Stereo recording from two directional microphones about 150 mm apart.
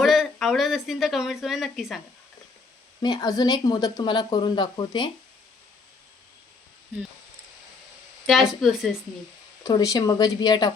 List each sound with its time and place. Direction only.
0.0 s a woman's voice: centre (ahead or behind)
3.0 s speech: 25° left (ahead or behind)
8.3 s speech: centre (ahead or behind)
9.6 s speech: 25° left (ahead or behind)